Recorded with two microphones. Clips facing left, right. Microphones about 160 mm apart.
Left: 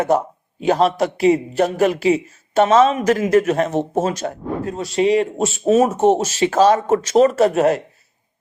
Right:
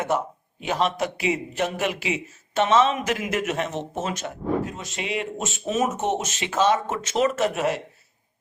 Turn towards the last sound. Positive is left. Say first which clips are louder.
# left 8 dB
turn(degrees=40)  # may be behind; listen again after turning